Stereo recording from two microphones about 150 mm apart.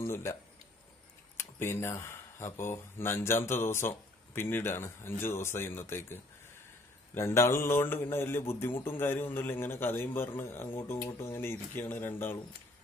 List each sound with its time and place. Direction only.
0.0 s a man's voice: 20° left (ahead or behind)
7.2 s a man's voice: 15° left (ahead or behind)